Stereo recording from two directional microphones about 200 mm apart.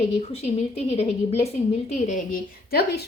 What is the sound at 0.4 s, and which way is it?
A woman's voice, 30° left (ahead or behind).